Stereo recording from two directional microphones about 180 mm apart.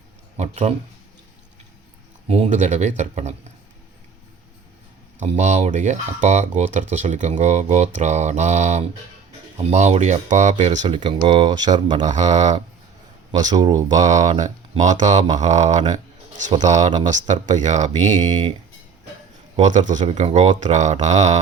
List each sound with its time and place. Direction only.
0.3 s speech: 40° right (ahead or behind)
2.2 s speech: 40° right (ahead or behind)
5.2 s speech: 40° right (ahead or behind)
10.8 s speech: 30° right (ahead or behind)
13.4 s speech: 20° right (ahead or behind)
14.0 s speech: 40° right (ahead or behind)
19.5 s speech: 40° right (ahead or behind)